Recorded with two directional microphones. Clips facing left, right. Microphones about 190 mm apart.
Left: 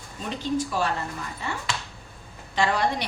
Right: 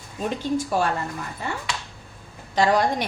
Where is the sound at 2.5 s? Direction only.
40° right (ahead or behind).